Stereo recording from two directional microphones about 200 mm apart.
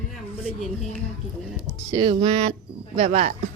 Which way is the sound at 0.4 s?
Centre (ahead or behind).